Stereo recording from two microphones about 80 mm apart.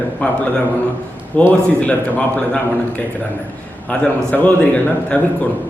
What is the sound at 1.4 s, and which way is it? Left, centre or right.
A man's voice, centre.